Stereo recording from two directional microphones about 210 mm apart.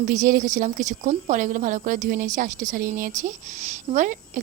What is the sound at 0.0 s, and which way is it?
A woman's voice, 40° right (ahead or behind).